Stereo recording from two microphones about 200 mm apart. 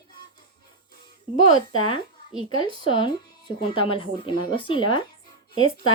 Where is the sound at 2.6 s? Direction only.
25° left (ahead or behind).